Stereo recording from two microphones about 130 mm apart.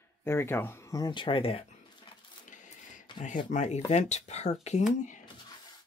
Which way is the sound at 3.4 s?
65° left (ahead or behind).